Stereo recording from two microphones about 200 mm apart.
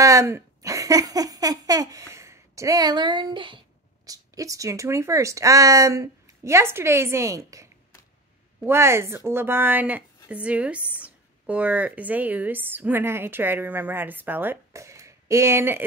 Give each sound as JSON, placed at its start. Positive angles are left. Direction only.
{"t": 0.0, "sound": "speech", "side_deg": -15}